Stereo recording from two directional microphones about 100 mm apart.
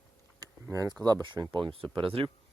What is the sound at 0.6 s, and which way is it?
Speech, 35° right (ahead or behind).